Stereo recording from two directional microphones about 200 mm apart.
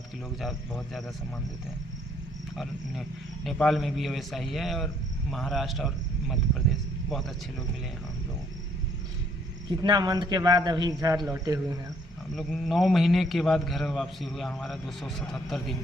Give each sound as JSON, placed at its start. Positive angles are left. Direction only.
{"t": 0.4, "sound": "a man's voice", "side_deg": 0}
{"t": 3.4, "sound": "a man's voice", "side_deg": 0}
{"t": 9.6, "sound": "a man's voice", "side_deg": -20}
{"t": 12.3, "sound": "a man's voice", "side_deg": 0}